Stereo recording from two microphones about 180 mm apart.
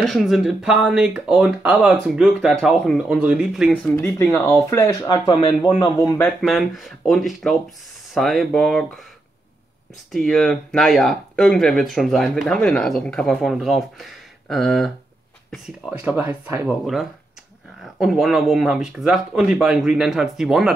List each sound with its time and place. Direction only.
0.0 s speech: centre (ahead or behind)
3.7 s speech: 10° left (ahead or behind); by 5.9 s 30° left (ahead or behind)
6.1 s speech: 5° left (ahead or behind)
10.1 s speech: centre (ahead or behind)